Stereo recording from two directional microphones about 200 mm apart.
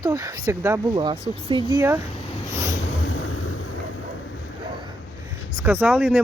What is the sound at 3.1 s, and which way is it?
Boat, 90° left.